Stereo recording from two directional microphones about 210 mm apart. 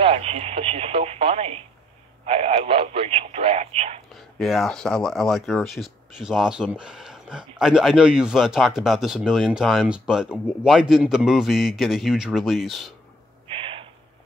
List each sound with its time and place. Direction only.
0.0 s speech: 30° right (ahead or behind)
4.1 s speech: centre (ahead or behind)
13.6 s owl: 25° right (ahead or behind)